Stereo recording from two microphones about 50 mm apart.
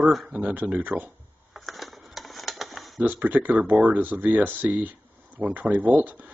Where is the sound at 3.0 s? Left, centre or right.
Right.